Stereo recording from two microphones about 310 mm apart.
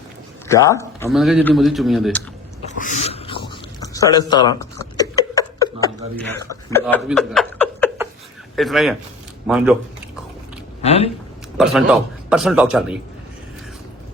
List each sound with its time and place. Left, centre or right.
0.4 s a man's voice: centre
2.7 s a sound: left
6.5 s a man's voice: centre
10.8 s speech: centre
11.5 s a man's voice: centre